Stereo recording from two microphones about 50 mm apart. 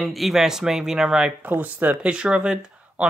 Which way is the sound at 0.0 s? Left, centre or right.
Centre.